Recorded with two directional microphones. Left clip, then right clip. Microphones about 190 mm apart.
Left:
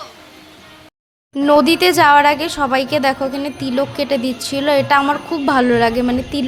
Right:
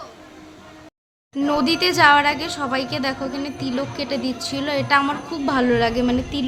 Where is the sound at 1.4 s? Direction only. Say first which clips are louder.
Left 8 dB; 35° left (ahead or behind).